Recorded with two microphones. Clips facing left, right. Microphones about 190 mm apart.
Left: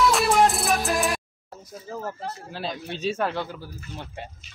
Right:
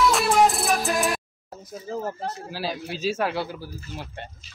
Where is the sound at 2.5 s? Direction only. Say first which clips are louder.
Left 1 dB; 5° right (ahead or behind).